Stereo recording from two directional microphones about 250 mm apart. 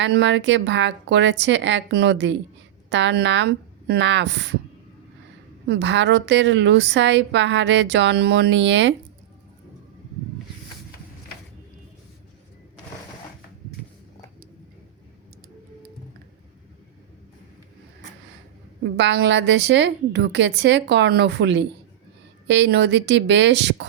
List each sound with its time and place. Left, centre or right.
0.0 s a woman's voice: right
5.6 s a woman's voice: right
18.9 s a woman's voice: right